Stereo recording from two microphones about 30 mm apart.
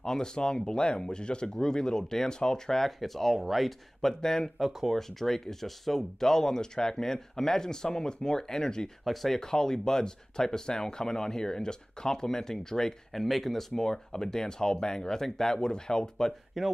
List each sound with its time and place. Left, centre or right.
0.0 s speech: left
2.8 s speech: centre
4.0 s speech: centre
4.6 s speech: centre
4.9 s speech: centre
9.0 s speech: centre
9.4 s speech: centre
13.1 s speech: centre; by 15.2 s left
15.2 s speech: centre
15.5 s speech: left
16.6 s speech: centre